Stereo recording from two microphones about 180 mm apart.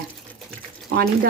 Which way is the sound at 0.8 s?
60° right (ahead or behind).